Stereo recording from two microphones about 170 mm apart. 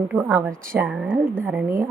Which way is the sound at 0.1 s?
10° right (ahead or behind).